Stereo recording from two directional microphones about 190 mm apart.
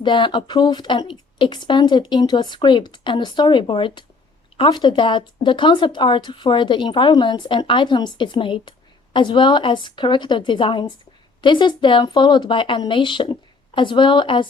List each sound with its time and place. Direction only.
0.0 s speech: 25° left (ahead or behind)